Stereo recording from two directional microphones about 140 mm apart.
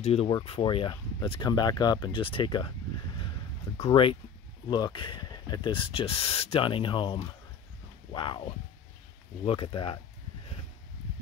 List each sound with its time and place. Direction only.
0.0 s speech: 45° left (ahead or behind)
0.3 s speech: 35° left (ahead or behind)
3.9 s speech: 40° left (ahead or behind)